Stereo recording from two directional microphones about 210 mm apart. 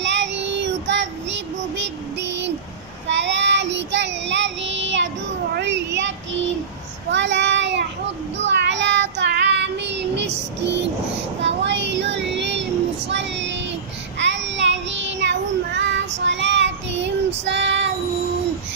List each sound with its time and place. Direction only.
0.0 s child singing: 55° right (ahead or behind)
5.5 s a sound: 55° right (ahead or behind)
7.1 s child singing: 60° right (ahead or behind)